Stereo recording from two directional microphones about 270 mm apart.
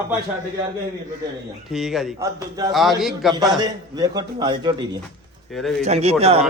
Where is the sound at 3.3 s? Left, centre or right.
Centre.